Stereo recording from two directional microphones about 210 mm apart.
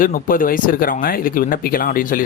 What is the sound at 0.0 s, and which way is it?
Speech, 40° left (ahead or behind).